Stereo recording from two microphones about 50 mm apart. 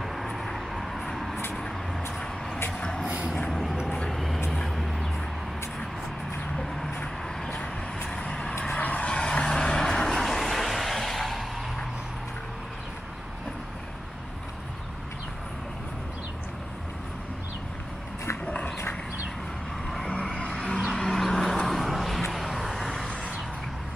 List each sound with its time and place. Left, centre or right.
0.0 s vehicle: centre
3.4 s a sound: centre
4.1 s vehicle: centre
6.5 s music: centre
8.2 s vehicle: centre
8.5 s vehicle: left
9.1 s vehicle: centre
18.4 s horse: left
20.3 s music: centre
20.9 s vehicle: centre